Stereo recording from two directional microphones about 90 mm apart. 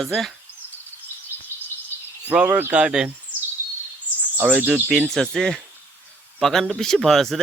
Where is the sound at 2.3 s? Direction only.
15° right (ahead or behind).